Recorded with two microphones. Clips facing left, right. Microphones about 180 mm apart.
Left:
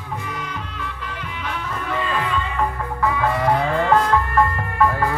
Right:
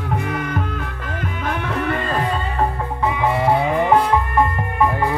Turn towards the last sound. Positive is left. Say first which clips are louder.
# right 1 dB
turn(degrees=-20)  # may be behind; listen again after turning